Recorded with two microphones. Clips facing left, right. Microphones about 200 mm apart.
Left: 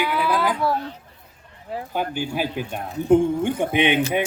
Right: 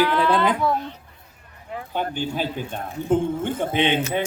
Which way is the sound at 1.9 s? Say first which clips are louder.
Even; 10° left (ahead or behind).